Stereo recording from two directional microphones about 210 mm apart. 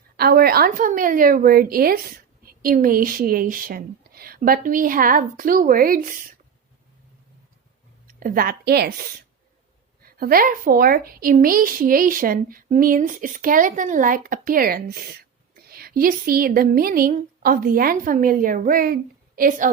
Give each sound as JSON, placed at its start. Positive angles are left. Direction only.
{"t": 0.2, "sound": "a woman's voice", "side_deg": -45}
{"t": 8.0, "sound": "a woman's voice", "side_deg": -40}
{"t": 10.0, "sound": "a woman's voice", "side_deg": -45}